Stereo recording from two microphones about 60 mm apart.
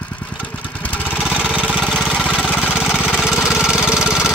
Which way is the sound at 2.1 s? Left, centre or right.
Centre.